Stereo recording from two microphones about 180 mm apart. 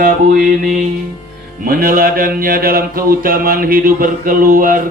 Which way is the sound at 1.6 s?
55° right (ahead or behind).